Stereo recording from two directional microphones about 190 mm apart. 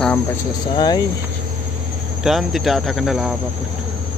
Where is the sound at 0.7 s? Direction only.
20° left (ahead or behind).